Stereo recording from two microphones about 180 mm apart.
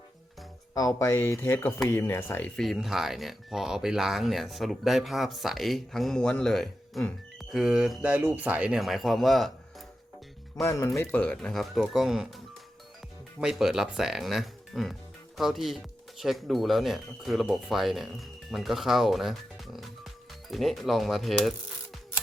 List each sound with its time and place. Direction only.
0.7 s speech: 20° left (ahead or behind)
2.6 s speech: centre (ahead or behind)
10.6 s speech: 15° left (ahead or behind); by 12.3 s 5° right (ahead or behind)
13.4 s speech: centre (ahead or behind)